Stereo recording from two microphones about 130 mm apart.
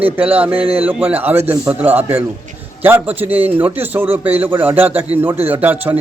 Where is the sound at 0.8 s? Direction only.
15° right (ahead or behind).